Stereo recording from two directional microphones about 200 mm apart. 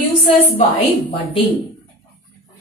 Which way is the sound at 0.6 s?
25° left (ahead or behind).